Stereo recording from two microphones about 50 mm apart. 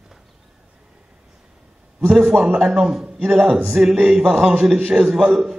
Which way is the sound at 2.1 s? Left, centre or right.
Centre.